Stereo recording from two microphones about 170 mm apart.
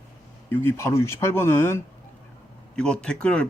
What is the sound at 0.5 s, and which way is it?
Speech, 15° left (ahead or behind).